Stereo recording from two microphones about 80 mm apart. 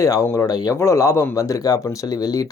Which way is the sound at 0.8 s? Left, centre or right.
Left.